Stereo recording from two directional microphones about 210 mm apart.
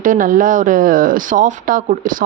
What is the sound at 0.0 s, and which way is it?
Speech, 40° right (ahead or behind).